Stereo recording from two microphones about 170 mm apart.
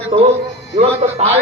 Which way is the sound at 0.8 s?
35° right (ahead or behind).